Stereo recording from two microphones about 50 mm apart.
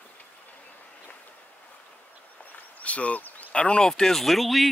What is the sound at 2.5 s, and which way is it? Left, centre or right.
Speech, left.